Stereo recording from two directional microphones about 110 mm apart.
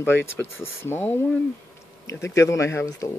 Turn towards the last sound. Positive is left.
turn(degrees=30)  # may be behind; listen again after turning